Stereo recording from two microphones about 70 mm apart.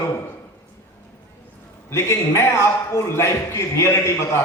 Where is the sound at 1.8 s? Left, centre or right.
Left.